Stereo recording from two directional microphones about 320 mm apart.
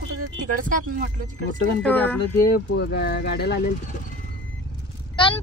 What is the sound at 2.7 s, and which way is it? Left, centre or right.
Speech, left.